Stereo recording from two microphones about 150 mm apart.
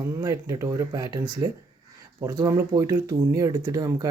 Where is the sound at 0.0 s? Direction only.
20° right (ahead or behind).